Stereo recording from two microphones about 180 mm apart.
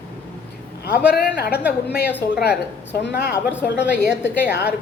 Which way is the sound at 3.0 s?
70° left (ahead or behind).